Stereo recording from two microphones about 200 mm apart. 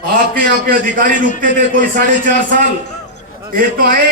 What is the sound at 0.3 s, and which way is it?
A man's voice, 45° right (ahead or behind).